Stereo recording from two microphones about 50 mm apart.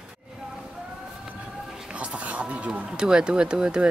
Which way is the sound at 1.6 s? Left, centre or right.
Centre.